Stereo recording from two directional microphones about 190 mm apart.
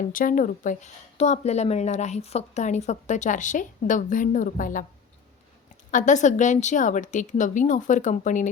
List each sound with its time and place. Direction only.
0.1 s speech: 45° left (ahead or behind)
5.9 s speech: 40° left (ahead or behind)